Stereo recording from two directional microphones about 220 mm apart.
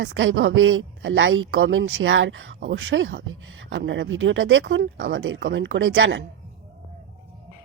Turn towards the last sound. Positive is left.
turn(degrees=-55)  # may be behind; listen again after turning